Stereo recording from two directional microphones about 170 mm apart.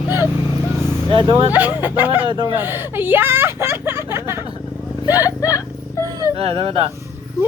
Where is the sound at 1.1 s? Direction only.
30° right (ahead or behind).